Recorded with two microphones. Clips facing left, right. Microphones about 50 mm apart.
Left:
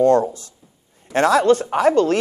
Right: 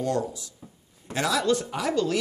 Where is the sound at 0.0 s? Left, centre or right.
Left.